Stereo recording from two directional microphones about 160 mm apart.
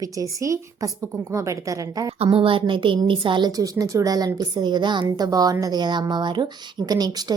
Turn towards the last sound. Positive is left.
turn(degrees=-25)  # may be behind; listen again after turning